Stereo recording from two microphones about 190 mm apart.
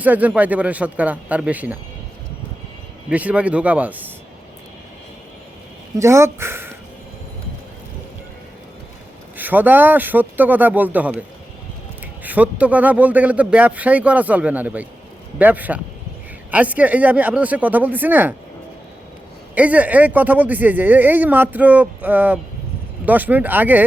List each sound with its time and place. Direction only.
0.0 s speech: 10° right (ahead or behind)
3.1 s speech: 5° right (ahead or behind)
6.0 s speech: 15° right (ahead or behind)
9.4 s speech: 10° right (ahead or behind)
12.2 s speech: 10° right (ahead or behind)
19.5 s speech: 5° right (ahead or behind)